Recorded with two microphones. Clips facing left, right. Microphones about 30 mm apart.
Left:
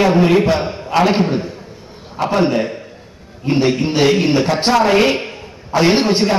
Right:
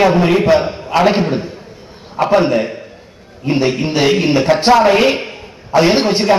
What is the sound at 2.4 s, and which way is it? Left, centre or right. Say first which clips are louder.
A man's voice: right 1 dB; centre.